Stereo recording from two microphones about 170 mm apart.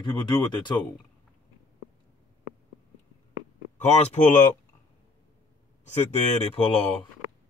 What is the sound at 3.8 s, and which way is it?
Speech, 40° left (ahead or behind).